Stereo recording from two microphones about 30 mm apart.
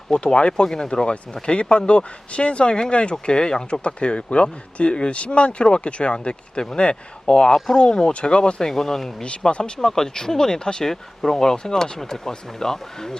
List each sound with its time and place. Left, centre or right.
0.1 s speech: left
0.5 s speech: left
3.8 s speech: left
8.7 s speech: centre
9.5 s speech: left
9.7 s speech: centre
10.8 s speech: centre